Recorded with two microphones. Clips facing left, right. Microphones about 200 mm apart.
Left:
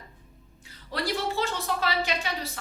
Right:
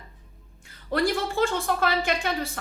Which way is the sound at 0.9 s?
50° right (ahead or behind).